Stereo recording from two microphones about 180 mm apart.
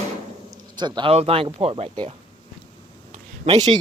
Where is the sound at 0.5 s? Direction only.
25° right (ahead or behind).